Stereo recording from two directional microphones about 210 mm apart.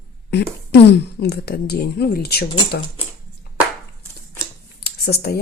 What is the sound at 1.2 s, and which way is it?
Speech, 50° left (ahead or behind).